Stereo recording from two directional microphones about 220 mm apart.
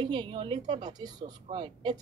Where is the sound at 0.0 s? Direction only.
20° right (ahead or behind).